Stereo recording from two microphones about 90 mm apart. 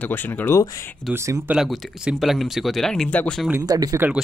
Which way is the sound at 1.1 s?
35° right (ahead or behind).